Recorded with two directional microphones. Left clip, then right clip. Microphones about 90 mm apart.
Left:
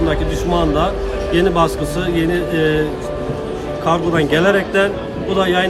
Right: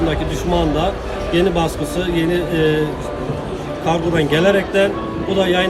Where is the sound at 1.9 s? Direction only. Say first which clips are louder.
Left 1 dB; 20° right (ahead or behind).